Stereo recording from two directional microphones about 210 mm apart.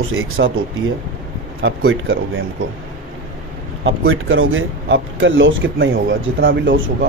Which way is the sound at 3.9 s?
70° right (ahead or behind).